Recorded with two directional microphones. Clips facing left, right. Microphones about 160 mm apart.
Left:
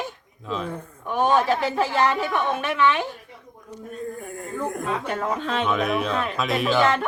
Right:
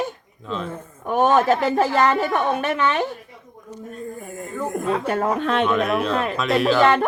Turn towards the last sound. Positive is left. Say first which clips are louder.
# right 4 dB
turn(degrees=0)  # may be behind; listen again after turning